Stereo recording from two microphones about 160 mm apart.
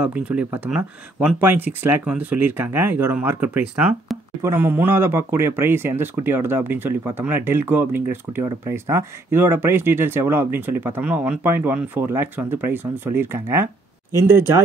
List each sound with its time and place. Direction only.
0.0 s speech: 10° right (ahead or behind)